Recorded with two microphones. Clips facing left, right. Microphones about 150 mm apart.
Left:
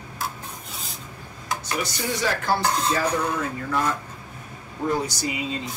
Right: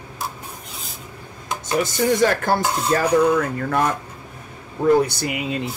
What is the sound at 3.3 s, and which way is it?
Speech, 60° right (ahead or behind).